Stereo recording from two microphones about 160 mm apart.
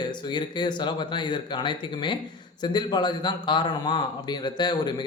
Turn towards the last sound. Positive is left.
turn(degrees=25)  # may be behind; listen again after turning